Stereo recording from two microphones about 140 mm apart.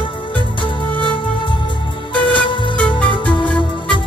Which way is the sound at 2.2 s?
35° left (ahead or behind).